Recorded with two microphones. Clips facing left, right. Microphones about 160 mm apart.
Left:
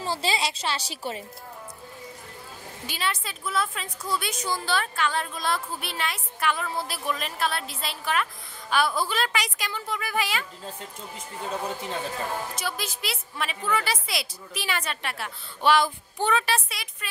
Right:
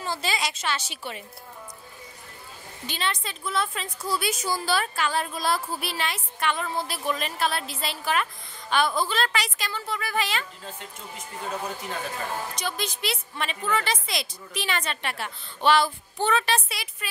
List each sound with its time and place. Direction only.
0.0 s a woman's voice: 30° left (ahead or behind)
2.9 s a woman's voice: 5° left (ahead or behind)
12.5 s a woman's voice: 5° left (ahead or behind)